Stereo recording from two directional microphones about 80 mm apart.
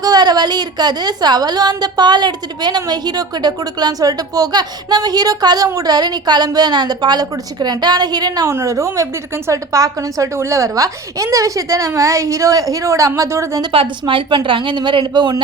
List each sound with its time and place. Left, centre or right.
0.0 s a woman's voice: right
8.4 s a woman's voice: right
13.6 s a woman's voice: right